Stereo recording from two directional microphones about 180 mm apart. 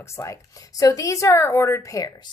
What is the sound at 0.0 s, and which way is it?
A woman's voice, 15° left (ahead or behind).